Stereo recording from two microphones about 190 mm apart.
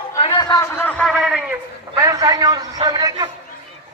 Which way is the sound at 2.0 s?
20° right (ahead or behind).